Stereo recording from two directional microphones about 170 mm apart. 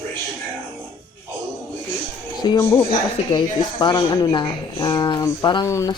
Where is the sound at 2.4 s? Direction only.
25° left (ahead or behind).